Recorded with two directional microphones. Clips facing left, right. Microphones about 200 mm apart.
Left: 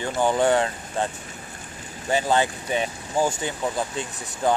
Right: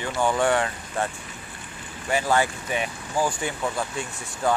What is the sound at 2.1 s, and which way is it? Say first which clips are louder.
Speech: left 1 dB; 25° left (ahead or behind).